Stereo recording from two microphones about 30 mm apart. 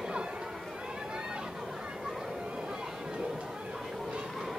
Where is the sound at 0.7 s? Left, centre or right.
Right.